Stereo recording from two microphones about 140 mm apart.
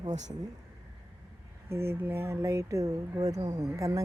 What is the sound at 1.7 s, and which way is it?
Speech, 15° right (ahead or behind).